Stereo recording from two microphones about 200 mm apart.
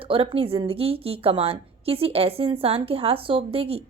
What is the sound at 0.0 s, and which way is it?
A woman's voice, 25° right (ahead or behind).